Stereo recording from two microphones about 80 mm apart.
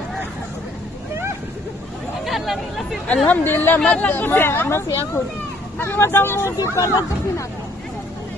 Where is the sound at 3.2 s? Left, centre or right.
Left.